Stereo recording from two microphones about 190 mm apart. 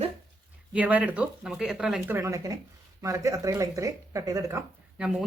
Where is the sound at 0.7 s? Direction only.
5° right (ahead or behind).